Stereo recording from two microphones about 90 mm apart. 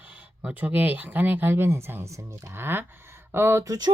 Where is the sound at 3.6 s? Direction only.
40° right (ahead or behind).